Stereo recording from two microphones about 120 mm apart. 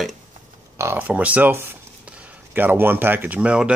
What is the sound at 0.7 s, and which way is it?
Speech, 20° right (ahead or behind).